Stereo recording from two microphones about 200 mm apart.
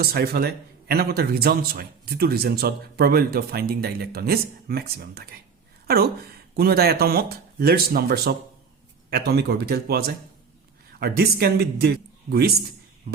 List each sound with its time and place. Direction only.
0.0 s a man's voice: 50° right (ahead or behind)
6.6 s a man's voice: 50° right (ahead or behind)